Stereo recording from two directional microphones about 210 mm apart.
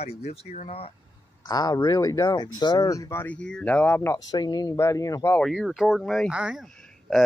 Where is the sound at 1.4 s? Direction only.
20° left (ahead or behind).